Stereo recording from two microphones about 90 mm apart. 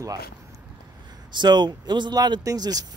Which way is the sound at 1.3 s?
55° right (ahead or behind).